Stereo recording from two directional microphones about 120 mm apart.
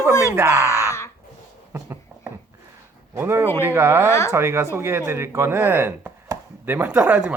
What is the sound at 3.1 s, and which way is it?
Speech, 20° right (ahead or behind).